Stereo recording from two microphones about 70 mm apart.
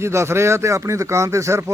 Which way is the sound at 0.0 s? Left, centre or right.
Right.